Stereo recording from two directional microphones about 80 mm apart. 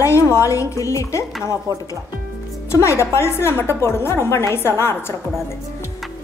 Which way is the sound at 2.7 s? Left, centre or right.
Left.